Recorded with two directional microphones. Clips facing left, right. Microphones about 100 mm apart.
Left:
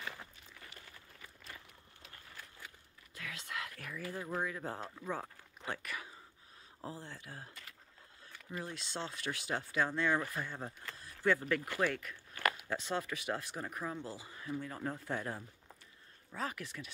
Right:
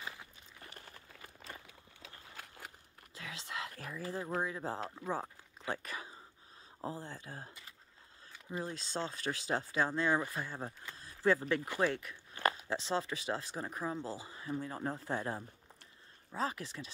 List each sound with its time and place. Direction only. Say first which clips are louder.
3.2 s speech: right 1 dB; 25° right (ahead or behind)
8.5 s speech: right 3 dB; 30° right (ahead or behind)